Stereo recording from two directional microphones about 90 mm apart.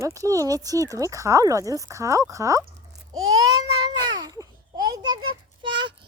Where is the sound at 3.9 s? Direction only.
50° right (ahead or behind).